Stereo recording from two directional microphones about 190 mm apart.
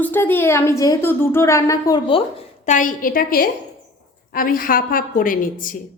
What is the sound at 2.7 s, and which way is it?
A woman's voice, 45° left (ahead or behind).